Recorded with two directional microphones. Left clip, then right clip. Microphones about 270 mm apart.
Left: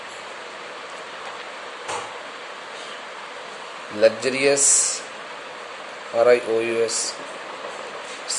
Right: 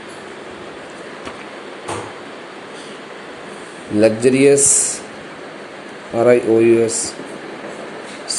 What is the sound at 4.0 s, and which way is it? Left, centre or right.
Speech, centre.